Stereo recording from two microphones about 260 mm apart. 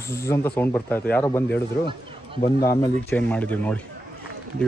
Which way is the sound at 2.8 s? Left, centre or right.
Centre.